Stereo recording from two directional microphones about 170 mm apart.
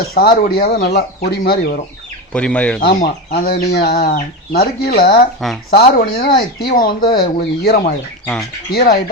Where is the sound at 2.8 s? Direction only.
70° left (ahead or behind).